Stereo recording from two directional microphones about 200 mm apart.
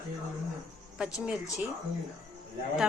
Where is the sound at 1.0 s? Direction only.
5° right (ahead or behind).